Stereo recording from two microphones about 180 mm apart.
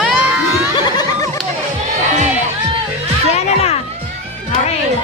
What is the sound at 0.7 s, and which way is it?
Music, 20° left (ahead or behind).